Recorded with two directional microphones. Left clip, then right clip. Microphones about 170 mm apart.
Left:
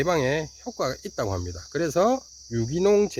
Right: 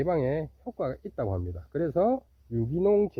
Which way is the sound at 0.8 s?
15° left (ahead or behind).